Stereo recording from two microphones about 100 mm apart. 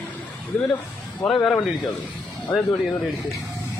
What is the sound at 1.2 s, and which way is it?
Speech, 10° left (ahead or behind).